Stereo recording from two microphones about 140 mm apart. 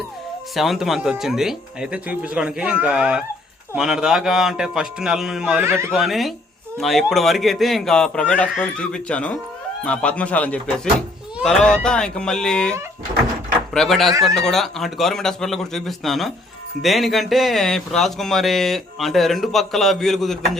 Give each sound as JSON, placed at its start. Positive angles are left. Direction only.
{"t": 0.5, "sound": "speech", "side_deg": 0}
{"t": 5.6, "sound": "speech", "side_deg": -15}
{"t": 5.9, "sound": "speech", "side_deg": 0}
{"t": 13.7, "sound": "speech", "side_deg": 0}